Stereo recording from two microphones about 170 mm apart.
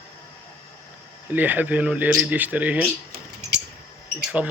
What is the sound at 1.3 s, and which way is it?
A man's voice, 10° right (ahead or behind).